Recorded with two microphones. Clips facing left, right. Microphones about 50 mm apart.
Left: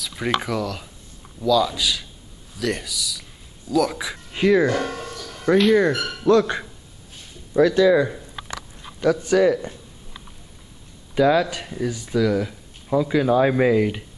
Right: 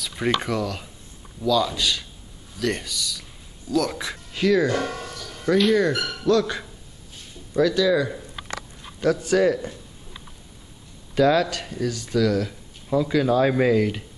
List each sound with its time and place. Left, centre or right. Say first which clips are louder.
0.0 s speech: even; centre
4.3 s speech: left 3 dB; left
4.7 s music: left 1 dB; centre
5.5 s speech: left 3 dB; centre
9.0 s speech: left 2 dB; centre
11.1 s speech: left 1 dB; centre